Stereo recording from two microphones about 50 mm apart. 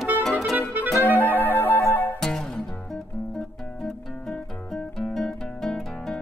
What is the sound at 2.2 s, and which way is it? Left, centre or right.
Music, centre.